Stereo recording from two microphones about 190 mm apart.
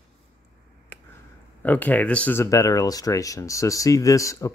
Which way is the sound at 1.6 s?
10° left (ahead or behind).